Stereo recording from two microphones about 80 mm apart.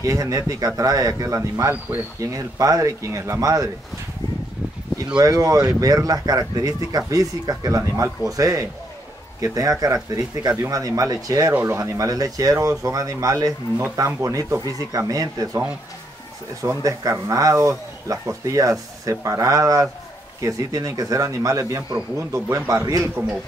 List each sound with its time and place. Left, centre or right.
0.0 s a man's voice: right
5.2 s a man's voice: right
16.6 s a man's voice: right